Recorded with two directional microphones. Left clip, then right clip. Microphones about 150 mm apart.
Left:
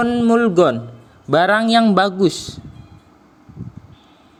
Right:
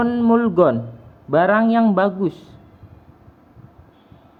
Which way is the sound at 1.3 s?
45° left (ahead or behind).